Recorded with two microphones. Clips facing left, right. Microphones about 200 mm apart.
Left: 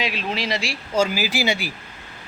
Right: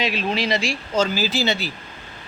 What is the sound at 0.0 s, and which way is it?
A man's voice, centre (ahead or behind).